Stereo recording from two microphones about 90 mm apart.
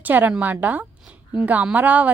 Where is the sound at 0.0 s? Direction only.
20° right (ahead or behind).